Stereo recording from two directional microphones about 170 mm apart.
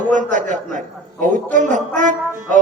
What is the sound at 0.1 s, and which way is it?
Speech, 50° right (ahead or behind).